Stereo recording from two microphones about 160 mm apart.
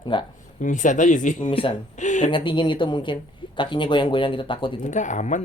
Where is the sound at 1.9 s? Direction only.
50° left (ahead or behind).